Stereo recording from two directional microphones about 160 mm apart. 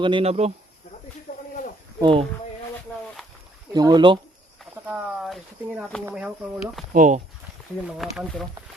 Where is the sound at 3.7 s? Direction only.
25° right (ahead or behind).